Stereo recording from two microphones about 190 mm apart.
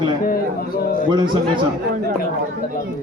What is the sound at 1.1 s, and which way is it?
Speech, 25° right (ahead or behind).